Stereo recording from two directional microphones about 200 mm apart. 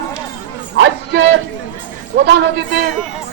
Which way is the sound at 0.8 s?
70° right (ahead or behind).